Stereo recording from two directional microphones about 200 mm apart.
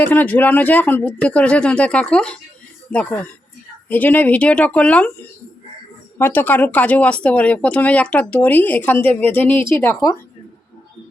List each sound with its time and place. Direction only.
0.0 s speech: 10° left (ahead or behind)
6.1 s speech: 10° left (ahead or behind)